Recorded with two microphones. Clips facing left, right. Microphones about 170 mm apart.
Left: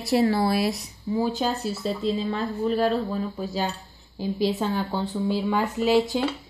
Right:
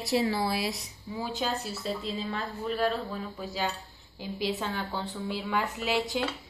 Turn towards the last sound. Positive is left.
turn(degrees=35)  # may be behind; listen again after turning